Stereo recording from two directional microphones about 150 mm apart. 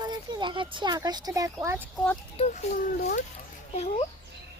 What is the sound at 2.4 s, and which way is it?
Speech, 50° left (ahead or behind).